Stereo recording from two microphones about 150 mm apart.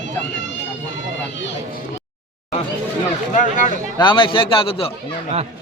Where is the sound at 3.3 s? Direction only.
60° left (ahead or behind).